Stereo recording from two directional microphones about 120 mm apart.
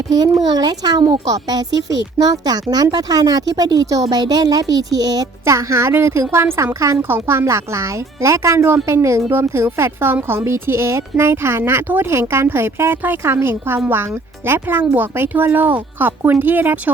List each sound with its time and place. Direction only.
0.4 s speech: 35° right (ahead or behind); by 16.9 s 15° right (ahead or behind)